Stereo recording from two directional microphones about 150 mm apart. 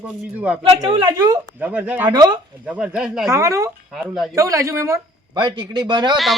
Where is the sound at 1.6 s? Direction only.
10° right (ahead or behind).